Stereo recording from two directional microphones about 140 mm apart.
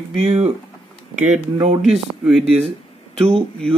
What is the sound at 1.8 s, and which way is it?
Speech, centre (ahead or behind).